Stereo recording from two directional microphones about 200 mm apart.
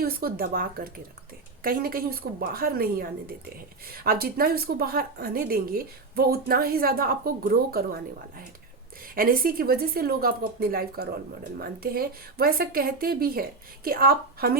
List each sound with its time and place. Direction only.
0.0 s speech: 50° right (ahead or behind)